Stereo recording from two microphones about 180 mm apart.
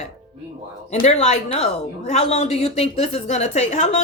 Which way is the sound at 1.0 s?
35° left (ahead or behind).